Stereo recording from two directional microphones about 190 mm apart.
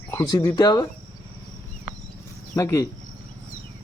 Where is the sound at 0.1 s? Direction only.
15° left (ahead or behind).